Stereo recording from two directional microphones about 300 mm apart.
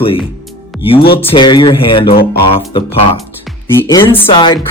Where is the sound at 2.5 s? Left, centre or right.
Centre.